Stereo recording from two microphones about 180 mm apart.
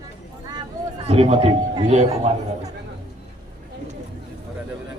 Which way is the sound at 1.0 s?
35° right (ahead or behind).